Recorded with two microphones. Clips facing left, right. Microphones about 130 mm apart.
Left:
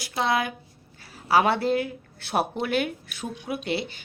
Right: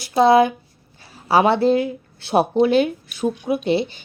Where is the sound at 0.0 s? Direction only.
30° right (ahead or behind).